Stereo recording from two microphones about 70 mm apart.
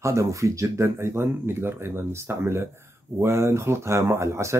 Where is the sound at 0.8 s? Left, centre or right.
Right.